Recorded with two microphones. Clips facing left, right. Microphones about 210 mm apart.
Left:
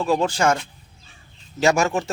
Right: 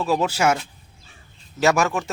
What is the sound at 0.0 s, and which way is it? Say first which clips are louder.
Speech: left 1 dB; 5° right (ahead or behind).